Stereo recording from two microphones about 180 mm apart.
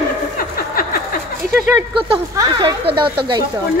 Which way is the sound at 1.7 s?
25° right (ahead or behind).